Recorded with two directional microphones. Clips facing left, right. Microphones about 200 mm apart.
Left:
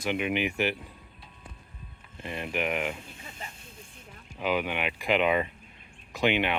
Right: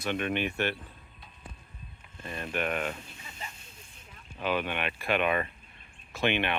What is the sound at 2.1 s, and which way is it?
Speech, 20° left (ahead or behind).